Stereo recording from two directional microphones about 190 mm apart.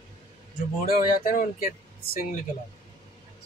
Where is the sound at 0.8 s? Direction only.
45° left (ahead or behind).